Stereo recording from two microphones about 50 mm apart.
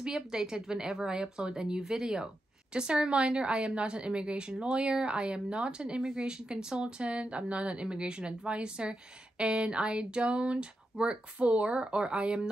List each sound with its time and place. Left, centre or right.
0.0 s a woman's voice: centre